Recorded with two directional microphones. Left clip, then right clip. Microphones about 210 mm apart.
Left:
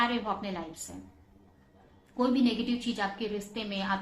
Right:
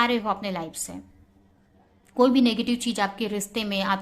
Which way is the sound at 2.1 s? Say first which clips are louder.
Right 8 dB; 40° right (ahead or behind).